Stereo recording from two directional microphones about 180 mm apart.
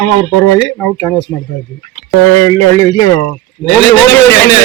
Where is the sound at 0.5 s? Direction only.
15° left (ahead or behind).